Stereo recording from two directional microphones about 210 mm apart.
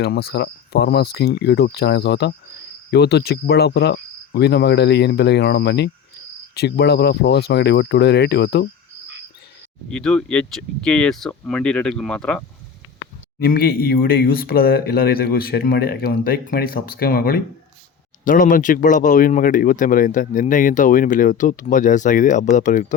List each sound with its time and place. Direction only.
0.0 s speech: 50° left (ahead or behind)
9.9 s speech: 5° left (ahead or behind)
13.4 s speech: 45° left (ahead or behind)